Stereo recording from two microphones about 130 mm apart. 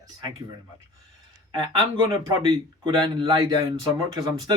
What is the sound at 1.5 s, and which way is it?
Speech, 30° right (ahead or behind).